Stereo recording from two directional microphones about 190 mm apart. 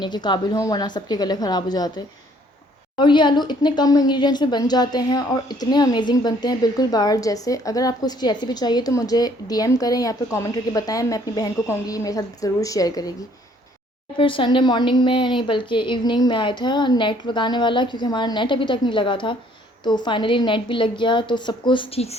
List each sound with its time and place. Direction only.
0.0 s speech: 25° left (ahead or behind)
14.2 s speech: 25° left (ahead or behind)